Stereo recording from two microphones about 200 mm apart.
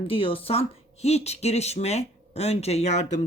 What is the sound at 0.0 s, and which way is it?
A woman's voice, 25° left (ahead or behind).